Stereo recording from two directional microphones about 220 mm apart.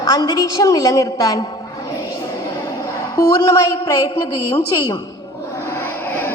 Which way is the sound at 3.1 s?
10° left (ahead or behind).